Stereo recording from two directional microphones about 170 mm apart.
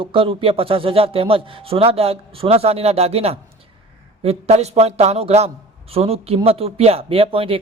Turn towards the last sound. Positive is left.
turn(degrees=-35)  # may be behind; listen again after turning